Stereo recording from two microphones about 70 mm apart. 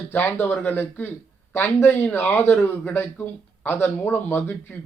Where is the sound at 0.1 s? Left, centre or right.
Left.